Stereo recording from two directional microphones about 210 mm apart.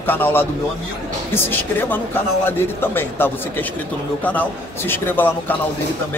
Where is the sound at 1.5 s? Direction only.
10° left (ahead or behind).